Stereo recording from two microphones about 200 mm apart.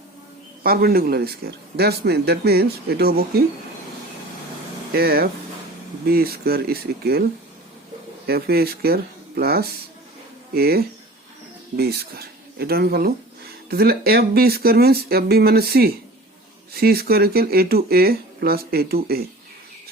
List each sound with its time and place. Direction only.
0.6 s speech: 50° right (ahead or behind)
4.9 s speech: 50° right (ahead or behind)
8.3 s speech: 50° right (ahead or behind)